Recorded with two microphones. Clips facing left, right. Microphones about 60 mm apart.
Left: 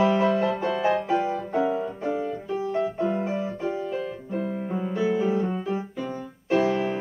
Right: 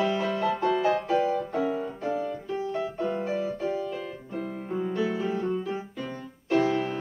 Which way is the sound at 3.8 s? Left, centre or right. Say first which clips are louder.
Left 3 dB; centre.